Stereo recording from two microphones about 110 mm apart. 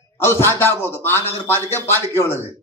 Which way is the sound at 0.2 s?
20° left (ahead or behind).